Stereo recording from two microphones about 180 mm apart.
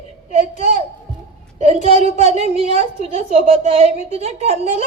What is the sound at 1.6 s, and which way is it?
A woman's voice, 35° right (ahead or behind).